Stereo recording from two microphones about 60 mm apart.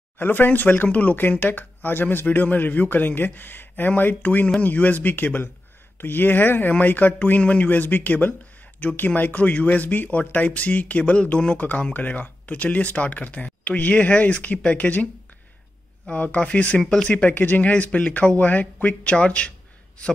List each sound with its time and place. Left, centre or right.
0.2 s speech: left
16.1 s speech: left
16.8 s speech: centre
17.3 s speech: left